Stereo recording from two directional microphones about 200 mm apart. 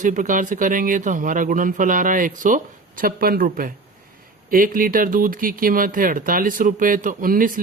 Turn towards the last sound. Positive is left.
turn(degrees=-45)  # may be behind; listen again after turning